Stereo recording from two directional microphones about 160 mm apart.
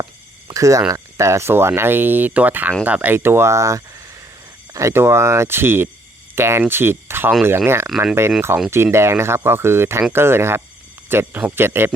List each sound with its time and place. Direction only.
0.0 s speech: 20° right (ahead or behind)